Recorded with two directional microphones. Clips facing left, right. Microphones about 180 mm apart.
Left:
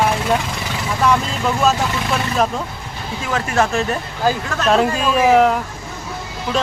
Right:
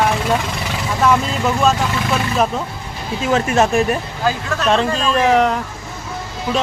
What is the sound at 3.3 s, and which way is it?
Speech, 20° right (ahead or behind).